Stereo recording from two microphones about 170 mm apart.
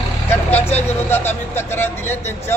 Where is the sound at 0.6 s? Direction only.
40° left (ahead or behind).